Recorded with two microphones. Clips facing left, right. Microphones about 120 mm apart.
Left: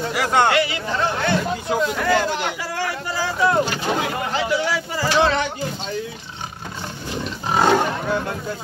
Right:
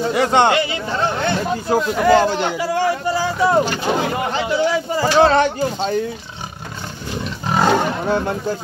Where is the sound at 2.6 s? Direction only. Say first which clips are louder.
Right 8 dB; 25° right (ahead or behind).